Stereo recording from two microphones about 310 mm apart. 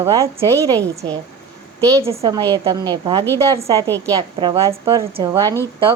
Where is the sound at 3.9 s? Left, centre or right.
Centre.